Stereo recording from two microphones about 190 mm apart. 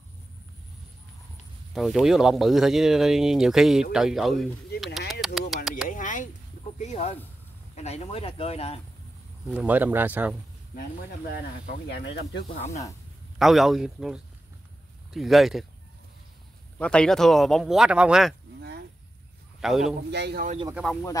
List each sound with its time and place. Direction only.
1.7 s speech: centre (ahead or behind)
4.7 s a sound: centre (ahead or behind)
5.9 s a sound: 45° left (ahead or behind)
6.8 s speech: 35° left (ahead or behind)
9.5 s speech: 5° right (ahead or behind)
11.9 s speech: 65° left (ahead or behind)
13.4 s speech: centre (ahead or behind)
16.7 s speech: 5° left (ahead or behind)
18.6 s a sound: 60° right (ahead or behind)
19.6 s speech: centre (ahead or behind)
20.1 s a man's voice: 60° right (ahead or behind)
20.7 s speech: centre (ahead or behind)